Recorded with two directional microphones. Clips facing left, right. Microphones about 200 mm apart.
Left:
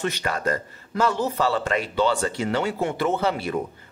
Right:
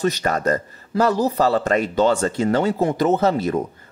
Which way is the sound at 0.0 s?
40° right (ahead or behind).